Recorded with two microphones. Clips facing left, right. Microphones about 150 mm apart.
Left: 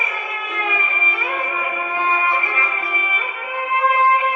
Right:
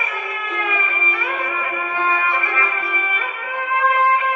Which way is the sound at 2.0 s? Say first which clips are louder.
Left 1 dB; 25° left (ahead or behind).